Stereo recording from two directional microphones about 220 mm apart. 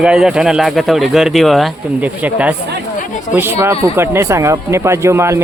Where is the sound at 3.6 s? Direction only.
10° right (ahead or behind).